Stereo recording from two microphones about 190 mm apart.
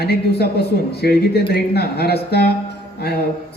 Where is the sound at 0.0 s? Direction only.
60° left (ahead or behind).